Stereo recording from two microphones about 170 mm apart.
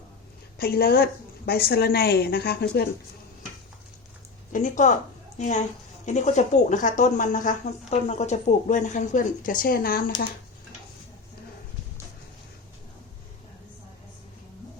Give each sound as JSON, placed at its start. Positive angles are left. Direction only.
{"t": 0.6, "sound": "a woman's voice", "side_deg": 65}
{"t": 4.5, "sound": "speech", "side_deg": 50}